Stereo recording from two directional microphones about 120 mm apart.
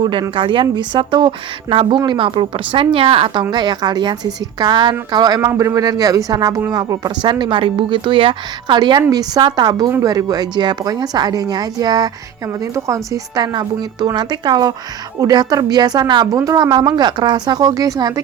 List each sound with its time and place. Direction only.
0.0 s a woman's voice: 45° right (ahead or behind)
3.5 s a woman's voice: 35° right (ahead or behind)